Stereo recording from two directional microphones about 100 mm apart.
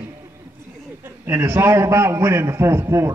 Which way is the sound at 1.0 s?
30° right (ahead or behind).